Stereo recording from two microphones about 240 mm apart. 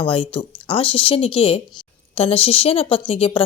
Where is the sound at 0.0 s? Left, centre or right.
Left.